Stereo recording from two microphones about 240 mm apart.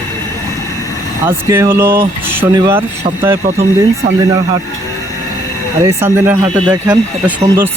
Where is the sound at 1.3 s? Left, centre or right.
Centre.